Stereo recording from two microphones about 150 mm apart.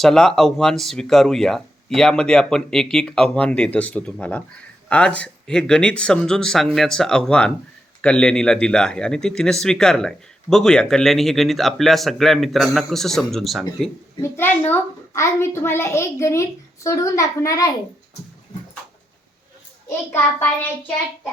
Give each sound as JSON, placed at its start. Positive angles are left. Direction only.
{"t": 0.0, "sound": "speech", "side_deg": 5}
{"t": 14.2, "sound": "a child's voice", "side_deg": 15}